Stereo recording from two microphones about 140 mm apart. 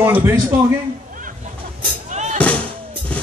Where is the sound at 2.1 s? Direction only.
55° right (ahead or behind).